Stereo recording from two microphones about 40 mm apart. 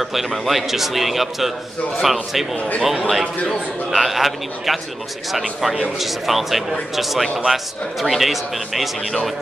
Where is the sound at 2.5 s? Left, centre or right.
Left.